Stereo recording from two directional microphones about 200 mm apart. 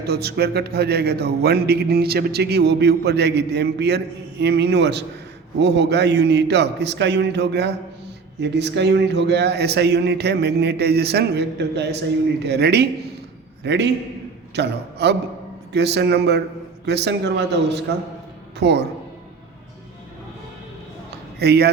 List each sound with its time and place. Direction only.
0.0 s a man's voice: 55° right (ahead or behind)
21.3 s speech: 55° right (ahead or behind)